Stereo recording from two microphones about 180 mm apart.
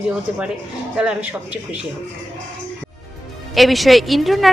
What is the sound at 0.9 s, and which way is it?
Speech, 5° right (ahead or behind).